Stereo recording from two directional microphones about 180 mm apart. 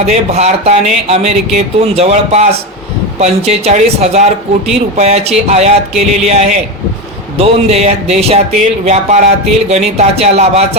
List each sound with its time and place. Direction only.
0.0 s speech: 35° right (ahead or behind)